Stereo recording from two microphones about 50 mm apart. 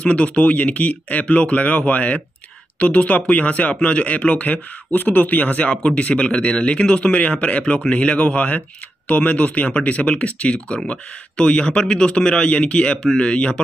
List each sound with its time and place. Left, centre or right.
0.0 s speech: left